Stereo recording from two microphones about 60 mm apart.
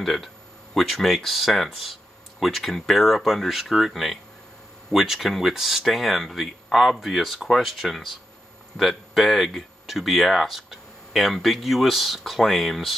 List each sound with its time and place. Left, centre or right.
0.0 s speech: centre